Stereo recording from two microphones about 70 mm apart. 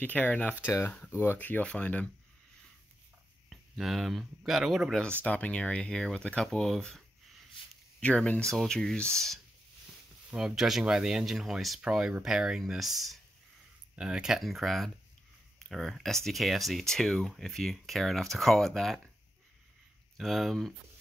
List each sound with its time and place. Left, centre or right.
0.0 s speech: left
3.7 s speech: centre
5.2 s speech: centre
8.0 s speech: centre
10.3 s speech: centre
13.9 s speech: centre
20.2 s speech: centre